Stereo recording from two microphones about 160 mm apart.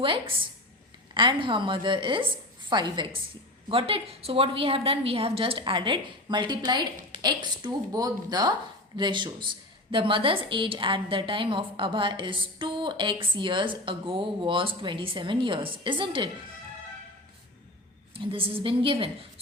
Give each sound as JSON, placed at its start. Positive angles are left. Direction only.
{"t": 0.0, "sound": "a woman's voice", "side_deg": -35}
{"t": 18.1, "sound": "a woman's voice", "side_deg": -35}